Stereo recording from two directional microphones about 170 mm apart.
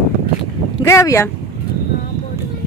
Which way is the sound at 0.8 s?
15° left (ahead or behind).